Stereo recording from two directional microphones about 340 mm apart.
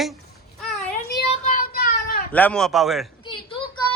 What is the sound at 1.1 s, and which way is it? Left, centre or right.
Child singing, left.